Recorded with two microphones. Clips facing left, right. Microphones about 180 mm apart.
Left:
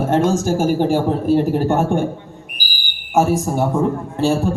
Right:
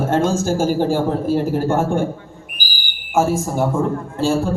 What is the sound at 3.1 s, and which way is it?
A man's voice, 20° left (ahead or behind).